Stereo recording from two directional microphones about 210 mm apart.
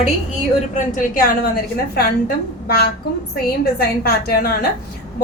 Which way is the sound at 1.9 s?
45° left (ahead or behind).